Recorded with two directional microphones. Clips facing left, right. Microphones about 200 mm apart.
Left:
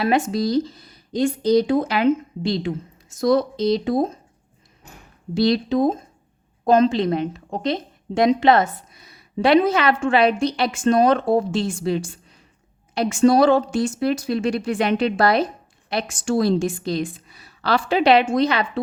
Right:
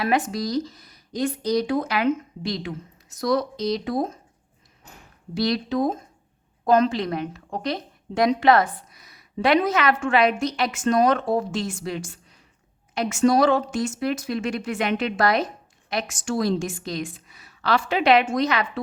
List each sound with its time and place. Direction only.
0.0 s a woman's voice: 25° left (ahead or behind)
5.3 s a woman's voice: 25° left (ahead or behind)